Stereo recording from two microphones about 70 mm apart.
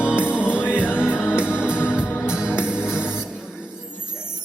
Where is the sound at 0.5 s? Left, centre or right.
Left.